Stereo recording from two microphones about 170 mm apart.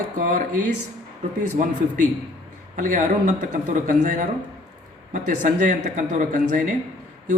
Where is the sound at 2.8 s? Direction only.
50° right (ahead or behind).